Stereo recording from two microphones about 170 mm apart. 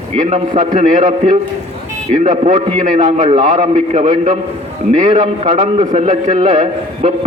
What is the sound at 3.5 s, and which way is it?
A man's voice, 45° right (ahead or behind).